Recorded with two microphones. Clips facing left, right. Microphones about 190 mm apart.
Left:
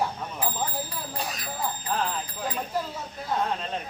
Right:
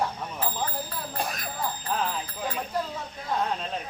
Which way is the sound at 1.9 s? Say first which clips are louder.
Left 1 dB; centre (ahead or behind).